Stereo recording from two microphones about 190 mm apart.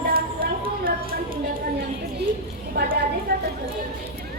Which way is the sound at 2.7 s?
50° right (ahead or behind).